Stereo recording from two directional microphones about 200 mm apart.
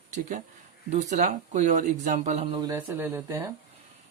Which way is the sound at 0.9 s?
35° right (ahead or behind).